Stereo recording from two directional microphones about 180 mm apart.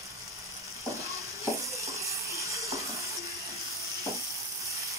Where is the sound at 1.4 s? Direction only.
15° right (ahead or behind).